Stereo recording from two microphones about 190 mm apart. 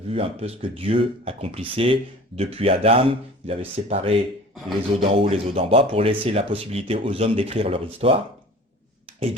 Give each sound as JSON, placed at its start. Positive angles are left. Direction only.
{"t": 0.1, "sound": "speech", "side_deg": -30}